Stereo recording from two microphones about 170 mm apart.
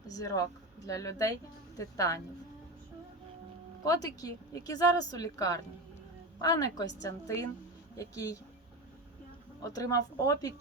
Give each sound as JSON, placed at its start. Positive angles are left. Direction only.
{"t": 0.1, "sound": "speech", "side_deg": 20}
{"t": 3.8, "sound": "speech", "side_deg": 20}
{"t": 9.6, "sound": "speech", "side_deg": 20}